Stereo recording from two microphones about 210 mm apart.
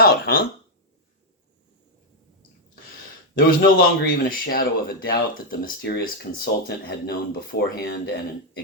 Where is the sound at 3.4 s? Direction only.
45° left (ahead or behind).